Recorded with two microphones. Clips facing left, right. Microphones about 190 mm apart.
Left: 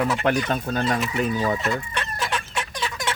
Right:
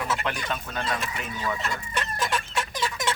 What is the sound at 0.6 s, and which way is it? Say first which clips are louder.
Speech: left 7 dB; 35° left (ahead or behind).